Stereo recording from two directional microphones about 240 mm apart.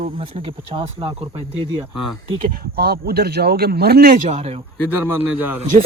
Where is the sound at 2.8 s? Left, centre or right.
Right.